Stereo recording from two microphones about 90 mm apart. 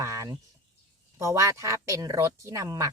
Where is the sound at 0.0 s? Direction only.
35° right (ahead or behind).